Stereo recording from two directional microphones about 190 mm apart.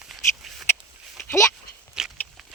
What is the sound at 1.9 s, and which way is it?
Walk, 5° right (ahead or behind).